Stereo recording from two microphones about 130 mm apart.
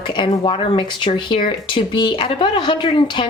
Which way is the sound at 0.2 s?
40° left (ahead or behind).